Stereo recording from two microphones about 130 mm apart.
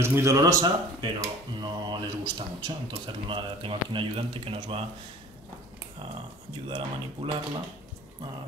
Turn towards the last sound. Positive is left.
turn(degrees=-40)  # may be behind; listen again after turning